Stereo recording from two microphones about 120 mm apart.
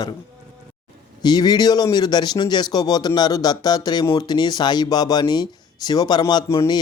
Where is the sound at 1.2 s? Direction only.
35° left (ahead or behind).